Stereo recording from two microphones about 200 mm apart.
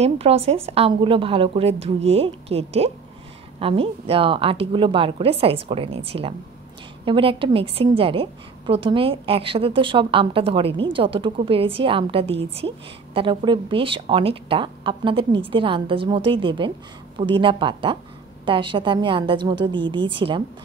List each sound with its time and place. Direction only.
0.0 s a woman's voice: 30° right (ahead or behind)